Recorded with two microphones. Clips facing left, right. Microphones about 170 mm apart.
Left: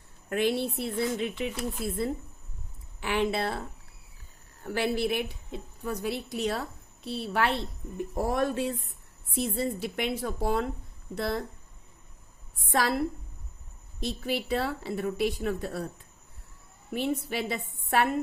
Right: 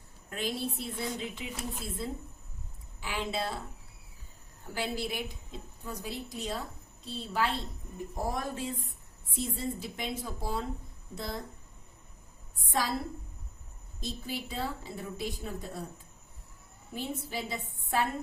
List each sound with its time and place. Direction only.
0.3 s a woman's voice: 65° left (ahead or behind)
3.0 s a woman's voice: 65° left (ahead or behind)
4.6 s a woman's voice: 65° left (ahead or behind)
12.6 s a woman's voice: 70° left (ahead or behind)
14.0 s a woman's voice: 70° left (ahead or behind)
16.9 s a woman's voice: 70° left (ahead or behind)